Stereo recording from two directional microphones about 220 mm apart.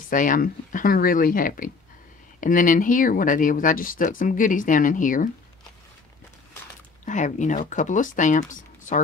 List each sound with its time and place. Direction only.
0.1 s speech: 35° left (ahead or behind)
7.1 s speech: 35° left (ahead or behind)